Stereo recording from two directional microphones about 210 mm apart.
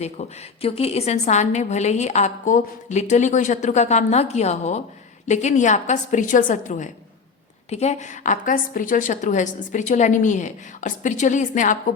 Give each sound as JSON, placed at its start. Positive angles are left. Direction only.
{"t": 0.0, "sound": "a woman's voice", "side_deg": 30}